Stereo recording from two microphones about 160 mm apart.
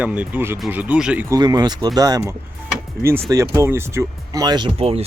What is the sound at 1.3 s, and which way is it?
Speech, 25° right (ahead or behind).